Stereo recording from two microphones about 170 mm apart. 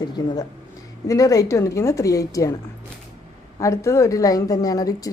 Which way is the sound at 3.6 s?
20° left (ahead or behind).